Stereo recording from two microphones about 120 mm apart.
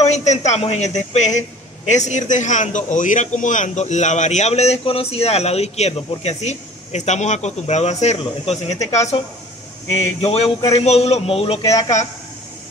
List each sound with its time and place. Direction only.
0.0 s a man's voice: 70° left (ahead or behind)
10.2 s a man's voice: 60° left (ahead or behind)